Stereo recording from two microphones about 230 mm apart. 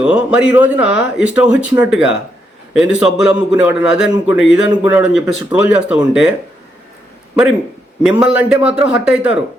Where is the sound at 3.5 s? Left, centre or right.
Left.